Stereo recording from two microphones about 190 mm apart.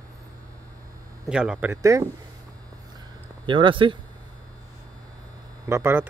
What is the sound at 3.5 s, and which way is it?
Speech, 25° right (ahead or behind).